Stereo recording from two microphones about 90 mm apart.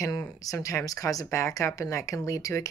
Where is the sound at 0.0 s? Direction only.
40° left (ahead or behind).